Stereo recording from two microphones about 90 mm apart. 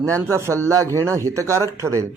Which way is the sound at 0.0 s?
35° right (ahead or behind).